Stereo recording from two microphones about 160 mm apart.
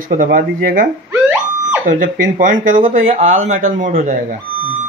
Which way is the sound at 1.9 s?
55° right (ahead or behind).